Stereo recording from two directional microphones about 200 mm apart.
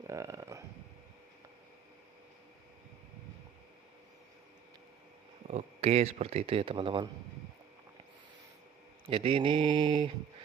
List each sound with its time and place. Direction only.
0.1 s speech: 15° right (ahead or behind)
5.5 s speech: 30° right (ahead or behind)
9.0 s speech: 25° right (ahead or behind)